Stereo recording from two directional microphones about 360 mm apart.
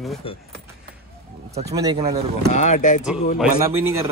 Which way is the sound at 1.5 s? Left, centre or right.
Centre.